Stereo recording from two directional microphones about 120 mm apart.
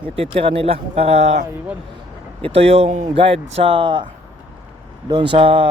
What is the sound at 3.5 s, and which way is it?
Speech, 45° right (ahead or behind).